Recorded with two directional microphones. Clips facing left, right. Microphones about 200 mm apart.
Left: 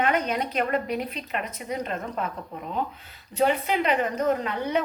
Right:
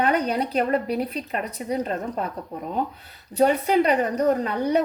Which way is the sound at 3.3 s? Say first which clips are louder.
Right 4 dB; 40° right (ahead or behind).